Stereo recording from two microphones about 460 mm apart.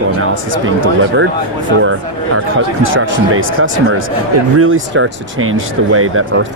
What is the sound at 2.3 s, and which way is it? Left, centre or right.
Speech, right.